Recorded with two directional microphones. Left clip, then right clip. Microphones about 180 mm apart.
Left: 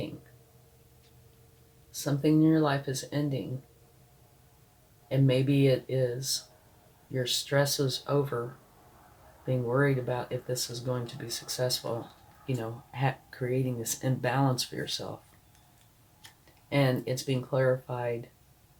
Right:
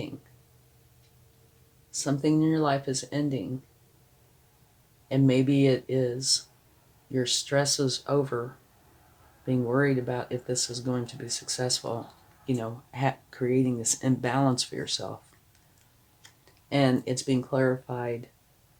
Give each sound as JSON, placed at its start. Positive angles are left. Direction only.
{"t": 1.9, "sound": "speech", "side_deg": -55}
{"t": 5.0, "sound": "speech", "side_deg": -50}
{"t": 9.5, "sound": "speech", "side_deg": -50}
{"t": 16.6, "sound": "speech", "side_deg": -50}